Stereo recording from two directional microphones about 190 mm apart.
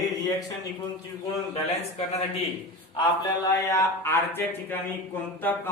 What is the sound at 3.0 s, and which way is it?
Speech, 15° left (ahead or behind).